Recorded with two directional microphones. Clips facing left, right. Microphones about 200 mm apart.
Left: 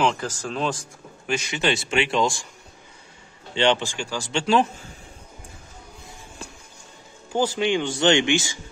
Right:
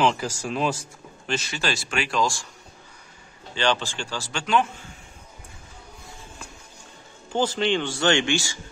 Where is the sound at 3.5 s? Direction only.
20° left (ahead or behind); by 4.9 s 40° left (ahead or behind).